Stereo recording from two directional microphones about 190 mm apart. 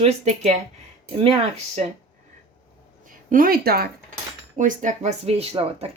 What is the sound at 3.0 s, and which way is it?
Speech, 45° right (ahead or behind).